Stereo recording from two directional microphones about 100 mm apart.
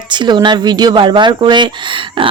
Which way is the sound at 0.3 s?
50° right (ahead or behind).